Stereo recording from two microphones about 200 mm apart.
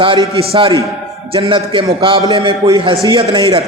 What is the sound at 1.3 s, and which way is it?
A man's voice, 25° right (ahead or behind).